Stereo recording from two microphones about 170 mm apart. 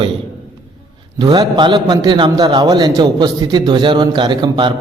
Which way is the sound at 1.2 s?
25° right (ahead or behind).